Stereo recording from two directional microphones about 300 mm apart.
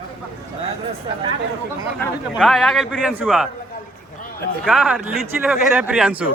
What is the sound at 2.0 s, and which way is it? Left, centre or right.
Speech, centre.